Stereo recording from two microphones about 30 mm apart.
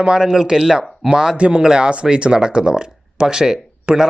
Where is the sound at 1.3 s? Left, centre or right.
Right.